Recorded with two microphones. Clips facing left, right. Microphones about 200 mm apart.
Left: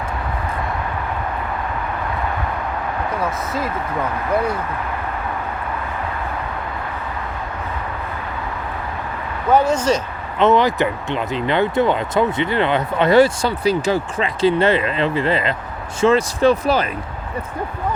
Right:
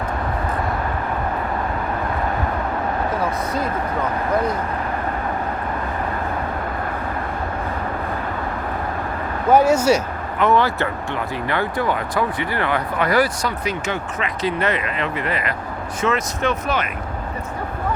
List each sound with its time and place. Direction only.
9.5 s speech: 10° right (ahead or behind)
10.3 s speech: 20° left (ahead or behind)